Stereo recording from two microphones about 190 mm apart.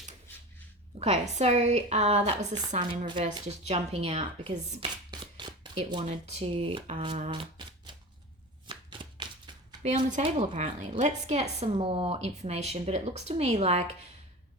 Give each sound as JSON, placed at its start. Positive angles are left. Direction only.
{"t": 0.9, "sound": "speech", "side_deg": -35}
{"t": 7.9, "sound": "shuffling cards", "side_deg": -25}
{"t": 9.8, "sound": "speech", "side_deg": -35}